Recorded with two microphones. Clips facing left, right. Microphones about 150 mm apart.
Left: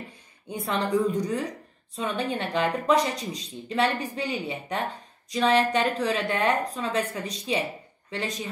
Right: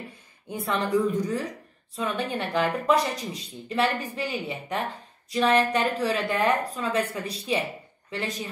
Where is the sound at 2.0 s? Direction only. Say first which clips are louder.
Even; 30° left (ahead or behind).